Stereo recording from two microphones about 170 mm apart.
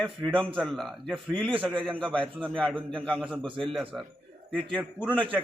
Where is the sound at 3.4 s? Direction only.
30° right (ahead or behind).